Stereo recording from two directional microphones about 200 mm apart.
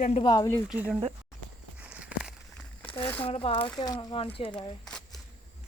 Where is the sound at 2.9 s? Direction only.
25° left (ahead or behind).